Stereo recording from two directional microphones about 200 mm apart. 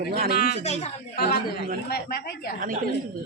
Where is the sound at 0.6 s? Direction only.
35° left (ahead or behind).